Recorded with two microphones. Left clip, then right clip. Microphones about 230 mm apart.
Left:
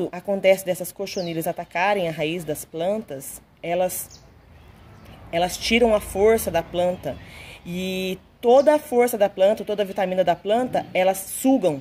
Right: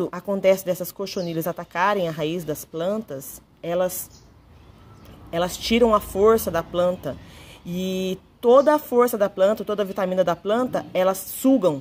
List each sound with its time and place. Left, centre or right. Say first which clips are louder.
0.0 s speech: left 1 dB; right
5.3 s speech: left 2 dB; right